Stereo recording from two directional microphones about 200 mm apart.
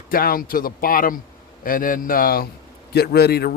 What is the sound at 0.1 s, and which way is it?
A man's voice, 45° left (ahead or behind).